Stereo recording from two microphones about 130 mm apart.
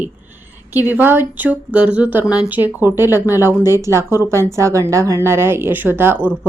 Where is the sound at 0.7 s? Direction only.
15° right (ahead or behind).